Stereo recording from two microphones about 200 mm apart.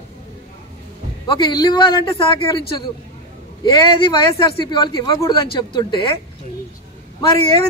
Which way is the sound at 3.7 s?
25° left (ahead or behind).